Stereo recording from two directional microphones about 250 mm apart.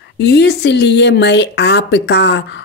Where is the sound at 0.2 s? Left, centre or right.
Left.